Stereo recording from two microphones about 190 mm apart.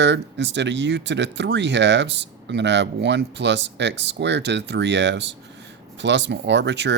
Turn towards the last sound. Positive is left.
turn(degrees=-65)  # may be behind; listen again after turning